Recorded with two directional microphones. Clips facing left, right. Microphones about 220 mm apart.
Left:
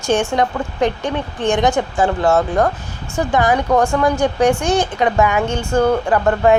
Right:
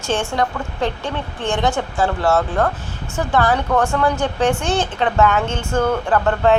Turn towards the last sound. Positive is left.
turn(degrees=10)  # may be behind; listen again after turning